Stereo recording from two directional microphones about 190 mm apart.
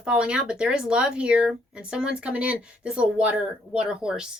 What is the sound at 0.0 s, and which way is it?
Speech, 5° right (ahead or behind).